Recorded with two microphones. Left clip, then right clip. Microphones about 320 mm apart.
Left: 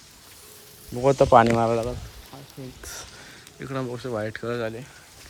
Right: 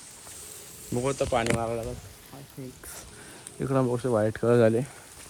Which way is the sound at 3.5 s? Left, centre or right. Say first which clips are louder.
Right 5 dB; centre.